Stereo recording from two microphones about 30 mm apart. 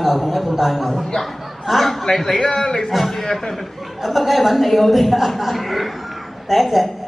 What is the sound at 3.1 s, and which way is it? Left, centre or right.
Speech, centre.